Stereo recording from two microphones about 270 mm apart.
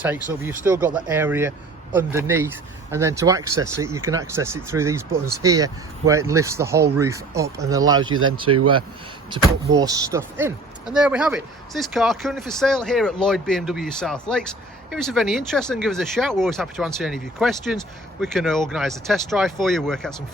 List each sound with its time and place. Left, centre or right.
0.4 s speech: centre
8.5 s speech: right
9.3 s speech: centre